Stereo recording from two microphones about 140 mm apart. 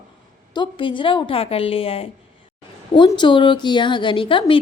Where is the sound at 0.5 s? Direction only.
35° left (ahead or behind).